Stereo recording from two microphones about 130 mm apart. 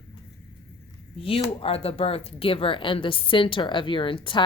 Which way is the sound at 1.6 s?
45° left (ahead or behind).